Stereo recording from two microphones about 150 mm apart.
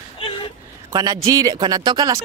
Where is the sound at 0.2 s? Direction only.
35° left (ahead or behind).